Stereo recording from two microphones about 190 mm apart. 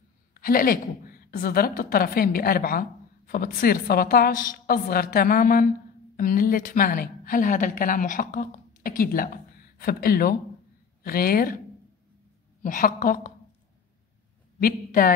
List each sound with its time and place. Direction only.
0.3 s a woman's voice: 50° left (ahead or behind)
12.6 s a woman's voice: 45° left (ahead or behind)
14.6 s a woman's voice: 45° left (ahead or behind)